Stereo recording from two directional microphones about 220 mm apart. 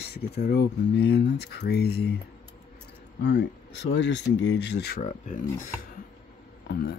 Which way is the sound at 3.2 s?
55° left (ahead or behind).